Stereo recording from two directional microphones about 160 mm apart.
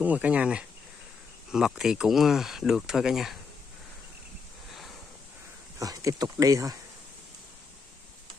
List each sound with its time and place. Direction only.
0.0 s speech: 10° right (ahead or behind)
5.8 s speech: 20° right (ahead or behind)